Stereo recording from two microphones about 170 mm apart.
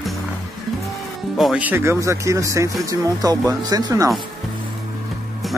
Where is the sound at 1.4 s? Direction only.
5° right (ahead or behind).